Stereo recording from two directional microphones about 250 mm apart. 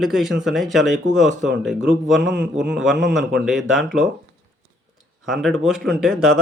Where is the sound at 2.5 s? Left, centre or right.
Centre.